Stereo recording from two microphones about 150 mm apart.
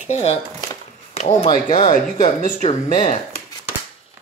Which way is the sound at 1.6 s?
60° left (ahead or behind).